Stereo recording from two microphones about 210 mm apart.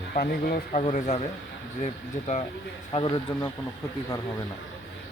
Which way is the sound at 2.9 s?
20° left (ahead or behind).